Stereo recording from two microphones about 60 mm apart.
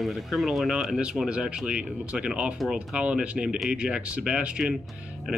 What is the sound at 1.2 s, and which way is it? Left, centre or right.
Speech, centre.